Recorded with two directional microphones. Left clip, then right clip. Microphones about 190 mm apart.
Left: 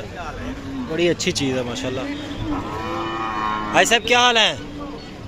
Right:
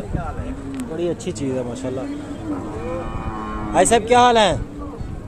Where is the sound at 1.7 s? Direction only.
15° right (ahead or behind).